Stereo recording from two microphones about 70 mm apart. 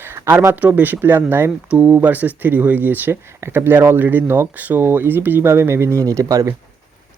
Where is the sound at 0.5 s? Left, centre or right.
Right.